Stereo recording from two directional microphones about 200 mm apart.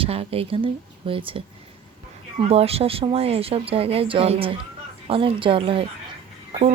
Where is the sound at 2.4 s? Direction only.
30° right (ahead or behind).